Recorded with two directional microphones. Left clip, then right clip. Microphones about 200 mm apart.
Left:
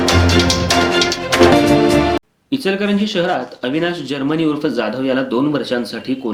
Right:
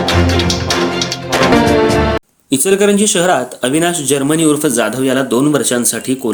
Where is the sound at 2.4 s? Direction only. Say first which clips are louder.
Right 8 dB; 45° right (ahead or behind).